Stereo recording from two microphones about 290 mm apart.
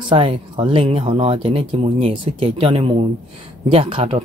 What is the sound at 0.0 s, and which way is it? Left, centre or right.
Speech, centre.